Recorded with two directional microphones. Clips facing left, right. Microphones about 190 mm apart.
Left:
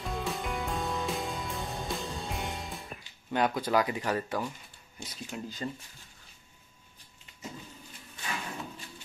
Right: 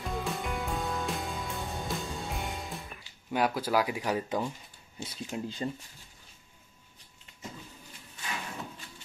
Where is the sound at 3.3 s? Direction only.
5° right (ahead or behind).